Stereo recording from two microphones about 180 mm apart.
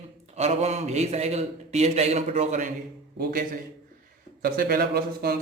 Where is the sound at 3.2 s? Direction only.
50° right (ahead or behind).